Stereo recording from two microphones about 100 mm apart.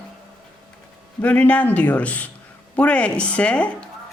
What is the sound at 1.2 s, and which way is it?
Speech, 15° left (ahead or behind).